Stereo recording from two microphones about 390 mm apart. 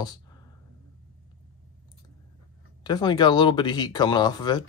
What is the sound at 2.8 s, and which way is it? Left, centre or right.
Speech, centre.